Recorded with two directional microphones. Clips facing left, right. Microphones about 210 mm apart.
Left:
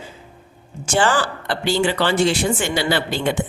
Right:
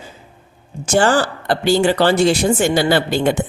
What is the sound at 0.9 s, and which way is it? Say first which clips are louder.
A man's voice: right 4 dB; 40° right (ahead or behind).